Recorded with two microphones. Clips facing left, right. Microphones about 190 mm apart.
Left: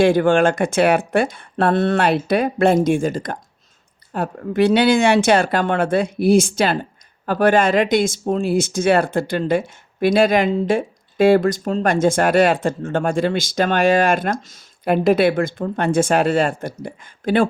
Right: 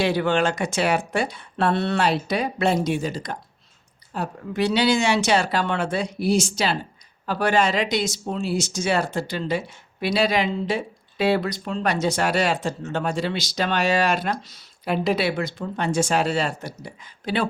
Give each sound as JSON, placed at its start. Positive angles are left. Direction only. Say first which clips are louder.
{"t": 0.0, "sound": "speech", "louder": "left 7 dB", "side_deg": 50}